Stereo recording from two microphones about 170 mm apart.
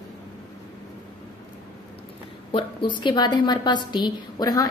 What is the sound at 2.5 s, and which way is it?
A woman's voice, 25° left (ahead or behind).